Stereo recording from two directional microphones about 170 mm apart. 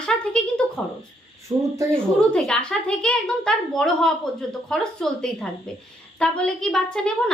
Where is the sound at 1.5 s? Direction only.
25° right (ahead or behind).